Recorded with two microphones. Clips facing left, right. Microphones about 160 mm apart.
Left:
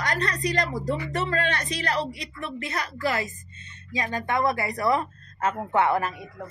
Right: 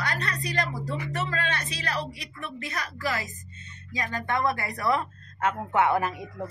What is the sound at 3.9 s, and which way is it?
Speech, 20° left (ahead or behind).